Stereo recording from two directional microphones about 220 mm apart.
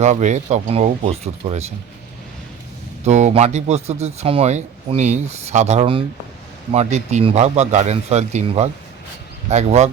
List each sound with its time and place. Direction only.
0.0 s speech: 35° right (ahead or behind)
3.0 s speech: 30° right (ahead or behind)